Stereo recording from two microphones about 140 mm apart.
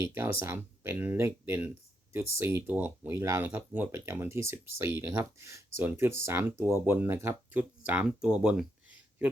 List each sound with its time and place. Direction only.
0.0 s speech: 15° right (ahead or behind)